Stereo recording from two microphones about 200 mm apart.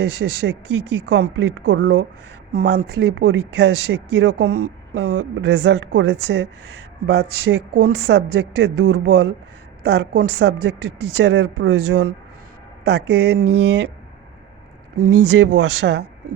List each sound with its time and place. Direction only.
0.0 s speech: 60° right (ahead or behind)
2.5 s speech: 50° right (ahead or behind)
15.0 s speech: 65° right (ahead or behind)